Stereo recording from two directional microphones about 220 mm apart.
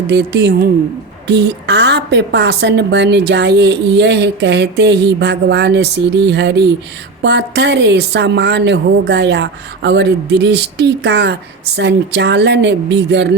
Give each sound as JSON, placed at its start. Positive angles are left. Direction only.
{"t": 0.1, "sound": "a woman's voice", "side_deg": -50}